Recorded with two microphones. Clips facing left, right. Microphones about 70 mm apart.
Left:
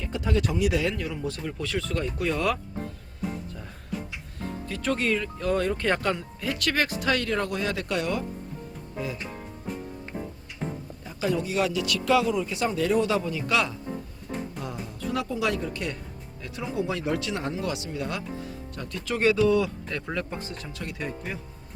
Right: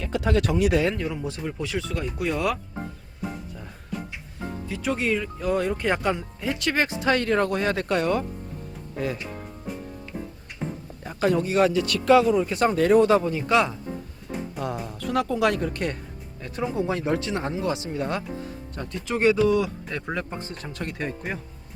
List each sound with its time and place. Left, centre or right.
0.0 s speech: right
1.0 s speech: centre
3.9 s music: centre
4.7 s speech: centre; by 8.2 s right
11.0 s speech: right
14.9 s speech: right
16.4 s speech: right
20.5 s speech: right